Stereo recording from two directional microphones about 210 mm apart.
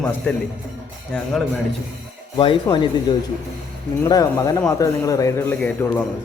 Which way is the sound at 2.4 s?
25° left (ahead or behind).